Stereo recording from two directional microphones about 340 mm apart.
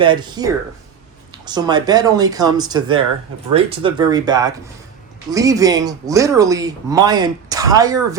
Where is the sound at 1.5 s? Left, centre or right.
Centre.